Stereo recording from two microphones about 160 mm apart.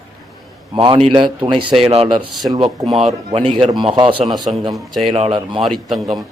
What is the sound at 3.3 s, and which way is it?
Speech, 35° right (ahead or behind).